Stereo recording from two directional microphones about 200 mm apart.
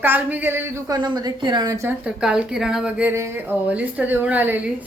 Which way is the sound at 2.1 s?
5° right (ahead or behind).